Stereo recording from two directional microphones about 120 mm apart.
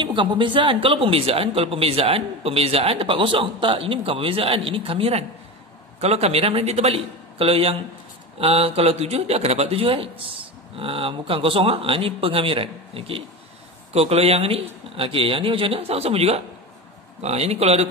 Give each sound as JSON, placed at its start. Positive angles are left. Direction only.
{"t": 0.0, "sound": "speech", "side_deg": -45}